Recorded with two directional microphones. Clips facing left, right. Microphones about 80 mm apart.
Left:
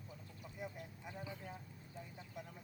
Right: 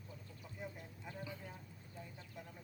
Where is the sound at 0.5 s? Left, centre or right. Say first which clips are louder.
Left 1 dB; centre.